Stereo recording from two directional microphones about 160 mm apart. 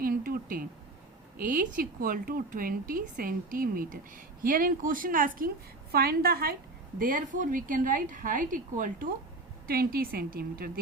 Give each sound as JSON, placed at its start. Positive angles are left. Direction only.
{"t": 0.0, "sound": "a sound", "side_deg": -65}
{"t": 1.4, "sound": "speech", "side_deg": -60}
{"t": 5.9, "sound": "a woman's voice", "side_deg": -75}
{"t": 7.0, "sound": "speech", "side_deg": -60}
{"t": 9.6, "sound": "a woman's voice", "side_deg": -70}